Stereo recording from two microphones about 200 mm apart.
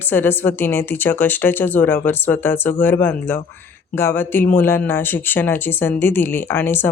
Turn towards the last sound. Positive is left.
turn(degrees=10)  # may be behind; listen again after turning